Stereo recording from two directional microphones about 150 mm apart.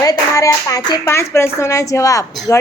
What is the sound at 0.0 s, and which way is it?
Speech, 25° left (ahead or behind).